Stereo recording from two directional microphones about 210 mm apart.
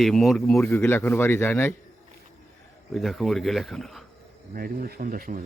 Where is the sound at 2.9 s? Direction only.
Centre (ahead or behind).